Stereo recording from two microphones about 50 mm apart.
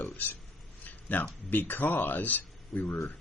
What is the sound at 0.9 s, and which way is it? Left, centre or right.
Speech, left.